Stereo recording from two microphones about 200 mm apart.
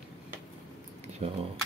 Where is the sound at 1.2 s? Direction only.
30° right (ahead or behind).